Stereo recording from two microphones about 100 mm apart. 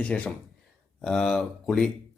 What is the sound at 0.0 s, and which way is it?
A man's voice, 15° left (ahead or behind).